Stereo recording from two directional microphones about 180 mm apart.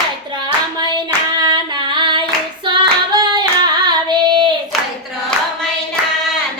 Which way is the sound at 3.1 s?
25° right (ahead or behind).